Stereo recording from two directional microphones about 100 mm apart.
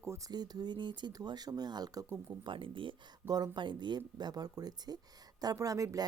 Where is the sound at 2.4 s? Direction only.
55° right (ahead or behind).